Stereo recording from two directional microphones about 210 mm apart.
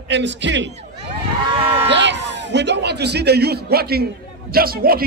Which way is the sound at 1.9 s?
55° right (ahead or behind).